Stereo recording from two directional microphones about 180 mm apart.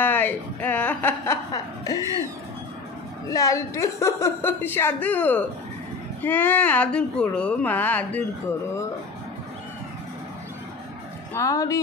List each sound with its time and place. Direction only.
0.0 s a woman's voice: 10° left (ahead or behind)
3.3 s a woman's voice: 20° left (ahead or behind)
11.3 s a woman's voice: 20° left (ahead or behind)